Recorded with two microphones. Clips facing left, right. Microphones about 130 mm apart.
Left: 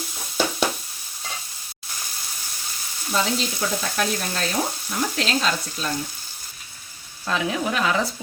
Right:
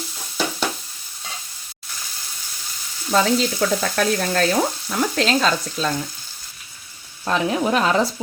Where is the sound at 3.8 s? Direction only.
85° right.